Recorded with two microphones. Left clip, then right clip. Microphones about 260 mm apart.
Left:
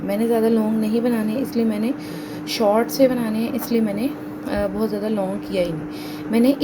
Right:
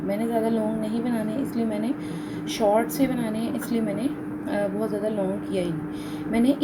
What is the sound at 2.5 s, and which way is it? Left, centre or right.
A woman's voice, left.